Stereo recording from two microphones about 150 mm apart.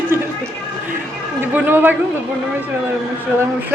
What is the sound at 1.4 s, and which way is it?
Speech, 15° right (ahead or behind).